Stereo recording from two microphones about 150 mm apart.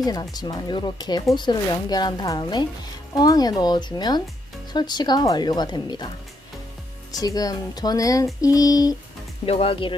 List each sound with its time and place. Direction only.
0.0 s a woman's voice: 25° left (ahead or behind)
9.5 s speech: 40° left (ahead or behind)